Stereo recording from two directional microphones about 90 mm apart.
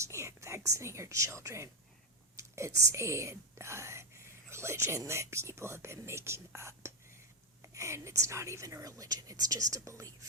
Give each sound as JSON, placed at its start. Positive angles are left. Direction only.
{"t": 0.0, "sound": "a woman's voice", "side_deg": -30}